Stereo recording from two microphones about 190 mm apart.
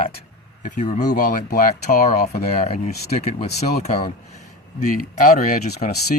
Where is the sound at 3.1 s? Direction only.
35° left (ahead or behind).